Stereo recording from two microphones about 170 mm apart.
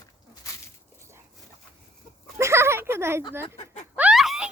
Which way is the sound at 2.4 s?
15° right (ahead or behind).